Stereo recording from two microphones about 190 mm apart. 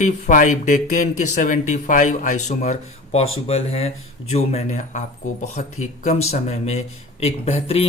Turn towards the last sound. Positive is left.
turn(degrees=30)  # may be behind; listen again after turning